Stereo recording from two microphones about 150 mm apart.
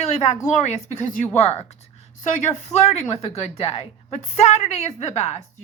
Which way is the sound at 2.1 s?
55° left (ahead or behind).